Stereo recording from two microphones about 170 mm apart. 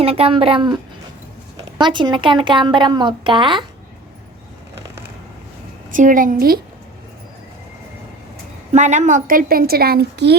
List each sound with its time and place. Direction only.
0.0 s a woman's voice: 35° right (ahead or behind)
5.9 s a woman's voice: 50° right (ahead or behind)
8.7 s a woman's voice: 45° right (ahead or behind); by 10.3 s 75° right (ahead or behind)